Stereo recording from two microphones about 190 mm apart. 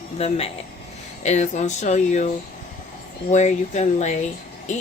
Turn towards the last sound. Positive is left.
turn(degrees=40)  # may be behind; listen again after turning